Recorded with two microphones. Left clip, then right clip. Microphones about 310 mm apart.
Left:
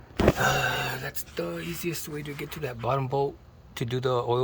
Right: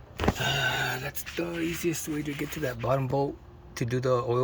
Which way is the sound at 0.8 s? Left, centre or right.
Centre.